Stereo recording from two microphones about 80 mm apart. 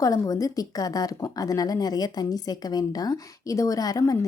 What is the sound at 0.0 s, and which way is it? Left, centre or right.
Speech, left.